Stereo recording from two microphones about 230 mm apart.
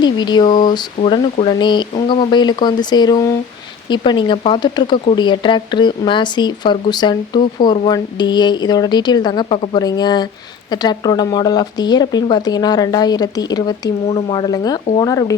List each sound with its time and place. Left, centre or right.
0.0 s speech: centre